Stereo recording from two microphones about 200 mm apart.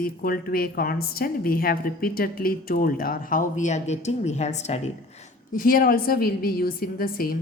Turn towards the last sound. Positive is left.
turn(degrees=45)  # may be behind; listen again after turning